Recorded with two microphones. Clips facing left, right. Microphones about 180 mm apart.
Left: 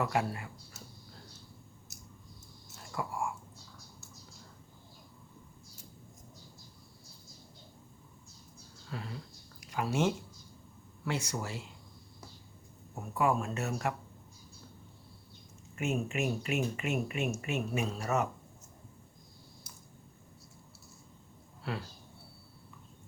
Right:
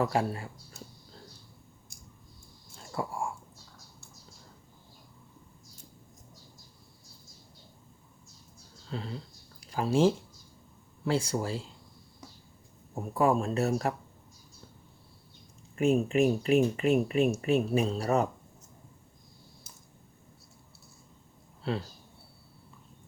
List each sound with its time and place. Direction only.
0.0 s speech: 30° right (ahead or behind)
2.7 s a sound: 30° right (ahead or behind)
8.9 s a sound: 25° right (ahead or behind)
11.0 s speech: 30° right (ahead or behind)
13.1 s speech: 35° right (ahead or behind)
15.7 s speech: 35° right (ahead or behind)
21.6 s speech: 25° right (ahead or behind)